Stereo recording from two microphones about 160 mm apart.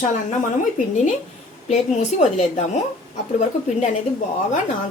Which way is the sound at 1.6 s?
45° left (ahead or behind).